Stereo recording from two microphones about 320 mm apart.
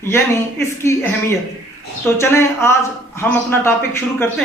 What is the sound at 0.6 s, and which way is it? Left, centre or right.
Speech, centre.